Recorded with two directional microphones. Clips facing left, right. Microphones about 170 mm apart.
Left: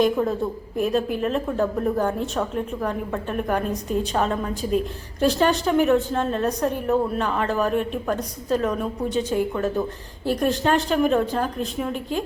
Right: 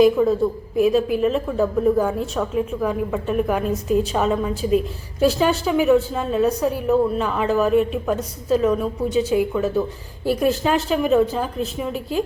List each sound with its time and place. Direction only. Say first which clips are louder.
0.0 s a woman's voice: right 5 dB; centre (ahead or behind)